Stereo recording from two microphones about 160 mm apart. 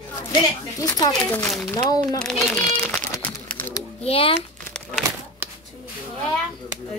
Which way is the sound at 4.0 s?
35° left (ahead or behind).